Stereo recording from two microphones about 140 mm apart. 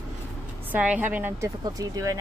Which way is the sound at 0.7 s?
10° right (ahead or behind).